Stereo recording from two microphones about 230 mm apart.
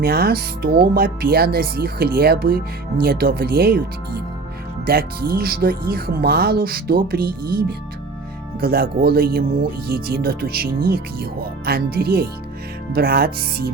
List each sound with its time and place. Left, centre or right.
0.0 s speech: right
8.6 s speech: right